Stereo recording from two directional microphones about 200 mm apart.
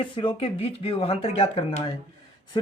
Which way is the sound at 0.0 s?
25° left (ahead or behind).